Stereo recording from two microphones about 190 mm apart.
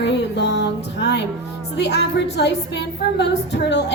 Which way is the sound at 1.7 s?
65° left (ahead or behind).